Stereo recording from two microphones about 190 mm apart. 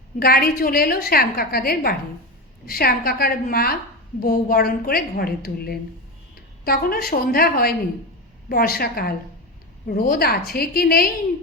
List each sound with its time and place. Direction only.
0.2 s a woman's voice: 50° left (ahead or behind)